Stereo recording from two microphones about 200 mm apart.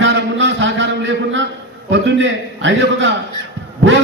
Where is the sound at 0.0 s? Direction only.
70° right (ahead or behind).